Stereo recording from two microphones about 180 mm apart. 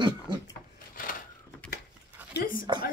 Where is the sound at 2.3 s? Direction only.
50° left (ahead or behind).